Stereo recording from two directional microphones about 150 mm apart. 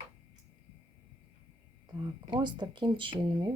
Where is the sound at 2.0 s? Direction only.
30° right (ahead or behind).